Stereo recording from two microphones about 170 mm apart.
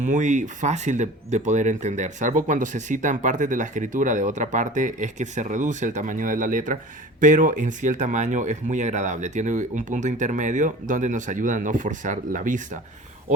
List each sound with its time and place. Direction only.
0.0 s speech: 45° right (ahead or behind)